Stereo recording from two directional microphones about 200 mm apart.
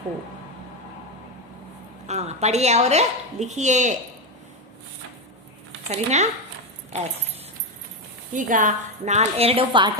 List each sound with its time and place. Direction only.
2.0 s speech: 35° right (ahead or behind)
5.9 s speech: 35° right (ahead or behind)
8.3 s speech: 40° right (ahead or behind); by 9.9 s 25° right (ahead or behind)